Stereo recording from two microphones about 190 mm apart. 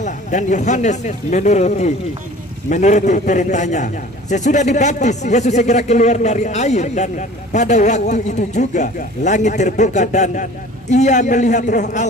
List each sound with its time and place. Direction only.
0.0 s a man's voice: 40° left (ahead or behind)